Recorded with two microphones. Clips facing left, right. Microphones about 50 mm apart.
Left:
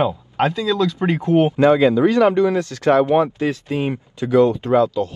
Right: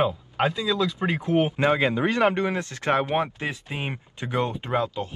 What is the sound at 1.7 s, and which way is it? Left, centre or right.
Speech, right.